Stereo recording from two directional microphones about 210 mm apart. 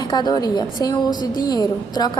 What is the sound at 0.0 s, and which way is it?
A woman's voice, 20° left (ahead or behind).